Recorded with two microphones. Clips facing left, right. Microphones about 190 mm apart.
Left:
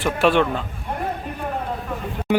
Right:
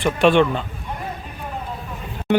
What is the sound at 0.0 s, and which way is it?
Speech, 5° left (ahead or behind).